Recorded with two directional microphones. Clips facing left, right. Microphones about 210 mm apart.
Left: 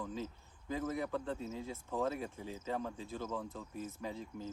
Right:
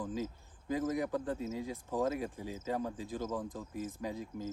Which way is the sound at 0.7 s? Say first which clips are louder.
Right 4 dB; 15° right (ahead or behind).